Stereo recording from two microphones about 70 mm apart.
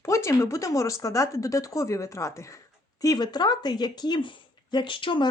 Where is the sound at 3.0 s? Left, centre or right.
Left.